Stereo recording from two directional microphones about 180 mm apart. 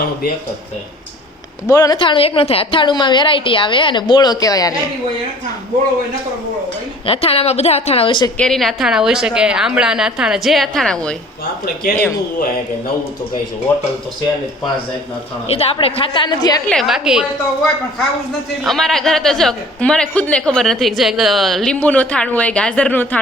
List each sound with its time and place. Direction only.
1.6 s a woman's voice: 20° left (ahead or behind)
7.0 s a woman's voice: 30° left (ahead or behind)
8.4 s a man's voice: centre (ahead or behind)
11.6 s speech: 60° left (ahead or behind)
15.4 s a woman's voice: 35° left (ahead or behind)
16.6 s a man's voice: centre (ahead or behind)
18.6 s a man's voice: centre (ahead or behind)